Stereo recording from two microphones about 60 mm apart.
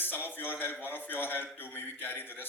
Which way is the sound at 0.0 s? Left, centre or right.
Left.